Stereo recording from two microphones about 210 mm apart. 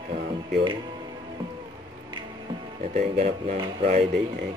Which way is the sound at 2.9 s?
35° right (ahead or behind).